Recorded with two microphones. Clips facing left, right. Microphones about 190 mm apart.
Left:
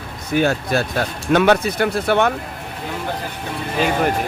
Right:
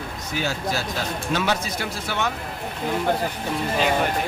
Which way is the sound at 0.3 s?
60° left (ahead or behind).